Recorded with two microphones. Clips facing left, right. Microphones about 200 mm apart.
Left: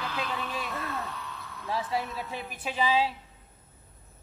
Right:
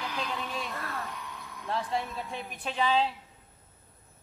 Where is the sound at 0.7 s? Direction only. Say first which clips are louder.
Left 3 dB; 20° left (ahead or behind).